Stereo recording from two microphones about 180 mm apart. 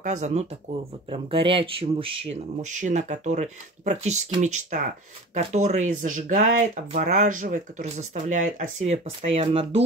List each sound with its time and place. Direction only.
0.0 s speech: 40° right (ahead or behind)
8.8 s speech: 35° right (ahead or behind)